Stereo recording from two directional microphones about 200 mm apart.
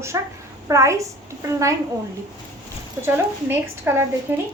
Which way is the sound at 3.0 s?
10° right (ahead or behind).